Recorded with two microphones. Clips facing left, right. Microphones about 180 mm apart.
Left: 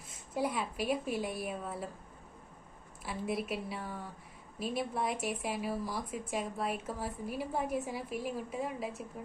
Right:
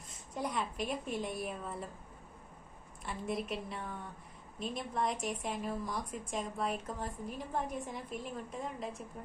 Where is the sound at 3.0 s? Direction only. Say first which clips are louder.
Left 2 dB; 5° left (ahead or behind).